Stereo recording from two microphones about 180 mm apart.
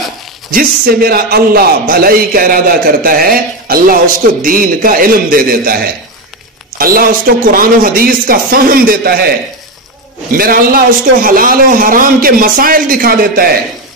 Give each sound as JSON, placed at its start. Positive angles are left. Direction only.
{"t": 0.5, "sound": "a man's voice", "side_deg": -55}
{"t": 10.3, "sound": "a man's voice", "side_deg": -55}